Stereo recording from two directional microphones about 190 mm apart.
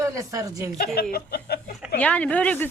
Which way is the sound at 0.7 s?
55° left (ahead or behind).